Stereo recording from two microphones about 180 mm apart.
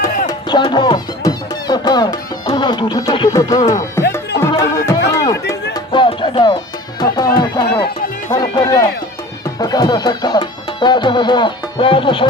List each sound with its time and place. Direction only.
0.3 s music: 25° left (ahead or behind)
7.3 s run: 25° left (ahead or behind)
8.3 s speech: 20° left (ahead or behind)
9.6 s music: 20° left (ahead or behind)